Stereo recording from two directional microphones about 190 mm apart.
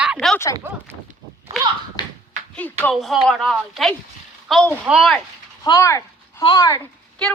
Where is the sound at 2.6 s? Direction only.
5° left (ahead or behind).